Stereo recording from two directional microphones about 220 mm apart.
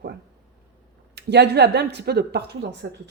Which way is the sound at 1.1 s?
50° right (ahead or behind).